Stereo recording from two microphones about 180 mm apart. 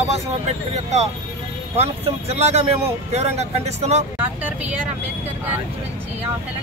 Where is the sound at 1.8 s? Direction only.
35° right (ahead or behind).